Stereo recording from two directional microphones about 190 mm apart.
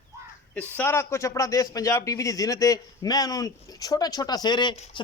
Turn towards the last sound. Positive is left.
turn(degrees=35)  # may be behind; listen again after turning